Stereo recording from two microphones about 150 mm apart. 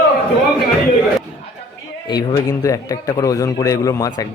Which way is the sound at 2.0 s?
30° left (ahead or behind).